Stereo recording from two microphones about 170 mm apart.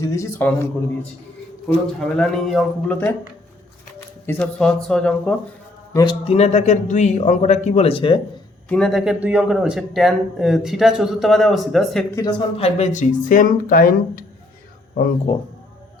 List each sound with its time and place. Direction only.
0.0 s a man's voice: 15° left (ahead or behind)
4.3 s speech: 5° left (ahead or behind)
5.9 s a man's voice: 20° left (ahead or behind)
6.2 s speech: 40° left (ahead or behind)
8.7 s speech: centre (ahead or behind)
12.5 s speech: 40° left (ahead or behind); by 14.3 s 55° left (ahead or behind)
15.3 s speech: 30° left (ahead or behind)